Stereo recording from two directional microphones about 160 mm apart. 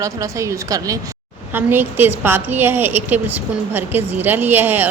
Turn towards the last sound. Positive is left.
turn(degrees=-10)  # may be behind; listen again after turning